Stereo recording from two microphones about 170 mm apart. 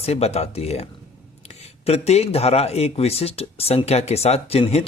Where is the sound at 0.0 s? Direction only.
40° left (ahead or behind).